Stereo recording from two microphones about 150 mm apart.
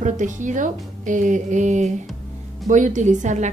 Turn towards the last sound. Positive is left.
turn(degrees=-55)  # may be behind; listen again after turning